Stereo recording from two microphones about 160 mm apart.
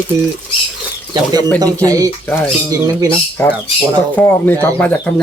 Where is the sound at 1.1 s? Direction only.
25° right (ahead or behind).